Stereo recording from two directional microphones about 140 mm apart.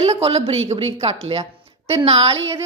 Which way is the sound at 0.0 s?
45° right (ahead or behind).